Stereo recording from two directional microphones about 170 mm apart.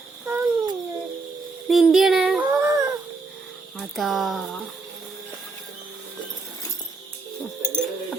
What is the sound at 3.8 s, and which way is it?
Speech, centre (ahead or behind).